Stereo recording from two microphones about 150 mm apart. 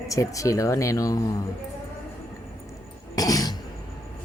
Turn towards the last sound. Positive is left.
turn(degrees=25)  # may be behind; listen again after turning